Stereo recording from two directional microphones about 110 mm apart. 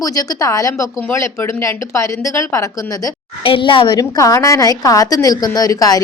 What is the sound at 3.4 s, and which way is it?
A woman's voice, 50° left (ahead or behind).